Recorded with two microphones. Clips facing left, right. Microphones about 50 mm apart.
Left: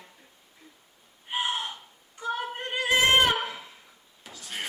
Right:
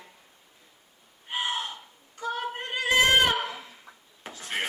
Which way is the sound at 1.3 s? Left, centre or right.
Left.